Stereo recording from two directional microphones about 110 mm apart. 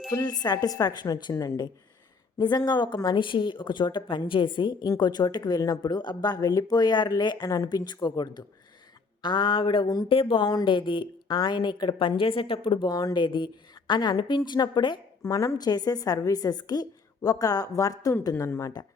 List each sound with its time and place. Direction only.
0.1 s a woman's voice: 35° left (ahead or behind)
7.5 s a woman's voice: 30° left (ahead or behind)
10.1 s a woman's voice: 55° left (ahead or behind)
12.9 s a woman's voice: 35° left (ahead or behind)
15.2 s a woman's voice: 30° left (ahead or behind)